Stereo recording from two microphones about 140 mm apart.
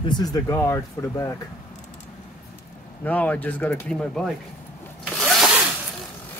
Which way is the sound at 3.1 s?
10° left (ahead or behind).